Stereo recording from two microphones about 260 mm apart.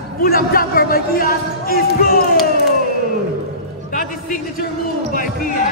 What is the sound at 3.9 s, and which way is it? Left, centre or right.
Music, left.